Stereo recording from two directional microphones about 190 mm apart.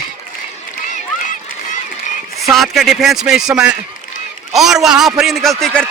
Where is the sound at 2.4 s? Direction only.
Centre (ahead or behind).